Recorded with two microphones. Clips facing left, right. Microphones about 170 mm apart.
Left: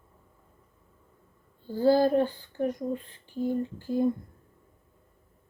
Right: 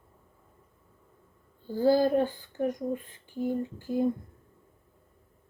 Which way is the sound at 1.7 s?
15° right (ahead or behind).